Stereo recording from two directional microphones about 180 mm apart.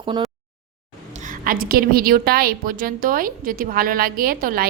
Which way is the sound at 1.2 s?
50° right (ahead or behind).